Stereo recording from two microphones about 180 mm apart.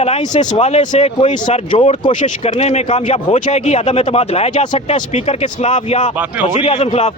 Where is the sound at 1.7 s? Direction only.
30° left (ahead or behind).